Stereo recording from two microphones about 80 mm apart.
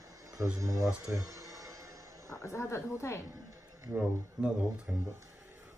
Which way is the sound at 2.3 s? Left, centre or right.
Left.